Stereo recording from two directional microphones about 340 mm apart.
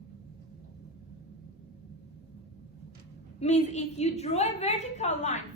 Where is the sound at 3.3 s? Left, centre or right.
Centre.